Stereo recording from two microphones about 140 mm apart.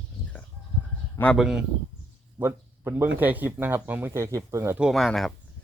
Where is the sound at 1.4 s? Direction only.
5° right (ahead or behind).